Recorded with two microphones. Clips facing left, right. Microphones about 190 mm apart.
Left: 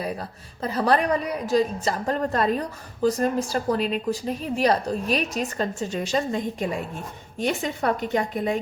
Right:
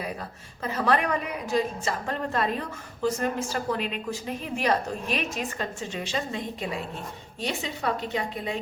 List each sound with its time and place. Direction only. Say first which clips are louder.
0.0 s a woman's voice: left 4 dB; 35° left (ahead or behind); by 8.5 s 50° left (ahead or behind)